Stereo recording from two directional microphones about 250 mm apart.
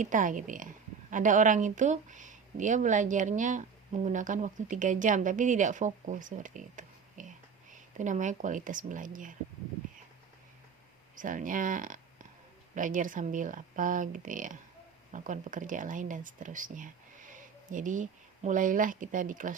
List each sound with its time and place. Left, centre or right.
0.0 s speech: right
11.1 s speech: right